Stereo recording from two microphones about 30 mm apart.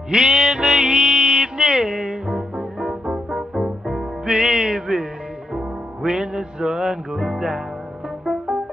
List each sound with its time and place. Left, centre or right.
0.1 s music: right
3.3 s music: centre
4.3 s music: right
6.0 s music: right